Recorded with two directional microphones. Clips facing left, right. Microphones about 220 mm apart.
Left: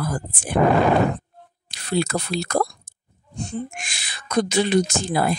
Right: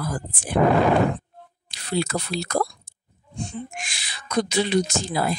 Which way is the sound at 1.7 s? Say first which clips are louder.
Left 2 dB; 50° left (ahead or behind).